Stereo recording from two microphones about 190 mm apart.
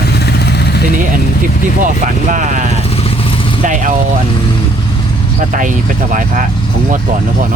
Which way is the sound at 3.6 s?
40° right (ahead or behind).